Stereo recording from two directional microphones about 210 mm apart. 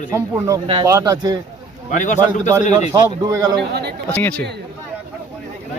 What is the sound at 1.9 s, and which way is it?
Speech, 35° left (ahead or behind).